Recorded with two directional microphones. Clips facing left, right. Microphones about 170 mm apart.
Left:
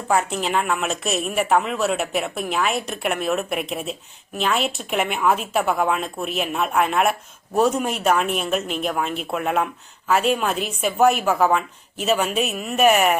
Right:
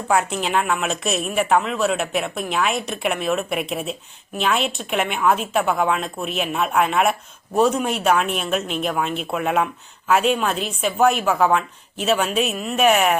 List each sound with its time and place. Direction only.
0.1 s speech: centre (ahead or behind)